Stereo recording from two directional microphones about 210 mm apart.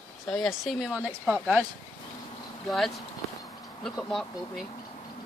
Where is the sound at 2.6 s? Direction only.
Centre (ahead or behind).